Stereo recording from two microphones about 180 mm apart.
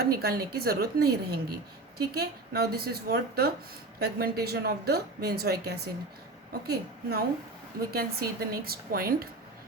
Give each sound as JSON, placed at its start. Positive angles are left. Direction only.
{"t": 0.0, "sound": "speech", "side_deg": -60}